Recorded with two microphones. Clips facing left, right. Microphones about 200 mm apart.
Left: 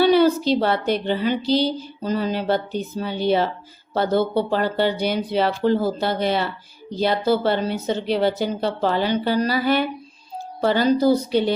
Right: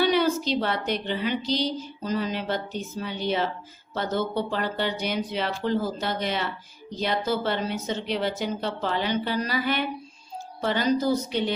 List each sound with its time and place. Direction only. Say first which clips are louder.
0.0 s a woman's voice: left 7 dB; 35° left (ahead or behind)